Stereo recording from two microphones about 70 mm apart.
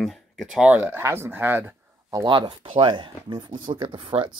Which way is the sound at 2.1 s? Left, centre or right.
Right.